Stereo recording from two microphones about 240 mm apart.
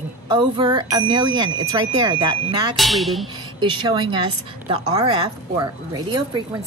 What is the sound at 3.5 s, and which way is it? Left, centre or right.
A woman's voice, centre.